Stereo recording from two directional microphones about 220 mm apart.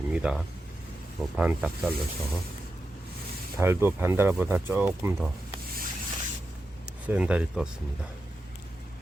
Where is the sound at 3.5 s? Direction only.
10° right (ahead or behind).